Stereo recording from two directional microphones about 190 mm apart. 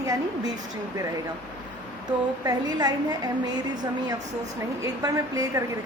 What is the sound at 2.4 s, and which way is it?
A woman's voice, 20° right (ahead or behind).